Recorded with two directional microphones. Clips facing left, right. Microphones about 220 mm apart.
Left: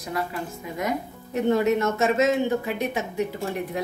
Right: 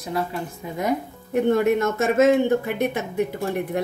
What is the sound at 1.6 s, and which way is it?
Speech, 55° right (ahead or behind).